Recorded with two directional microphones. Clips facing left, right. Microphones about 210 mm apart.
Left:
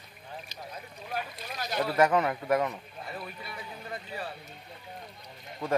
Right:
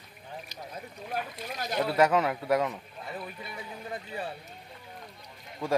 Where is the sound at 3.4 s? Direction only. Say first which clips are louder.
Right 1 dB; 20° right (ahead or behind).